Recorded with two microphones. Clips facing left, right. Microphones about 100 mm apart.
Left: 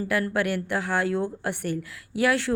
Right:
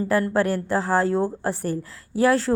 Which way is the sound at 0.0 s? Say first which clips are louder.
Right 4 dB; 35° right (ahead or behind).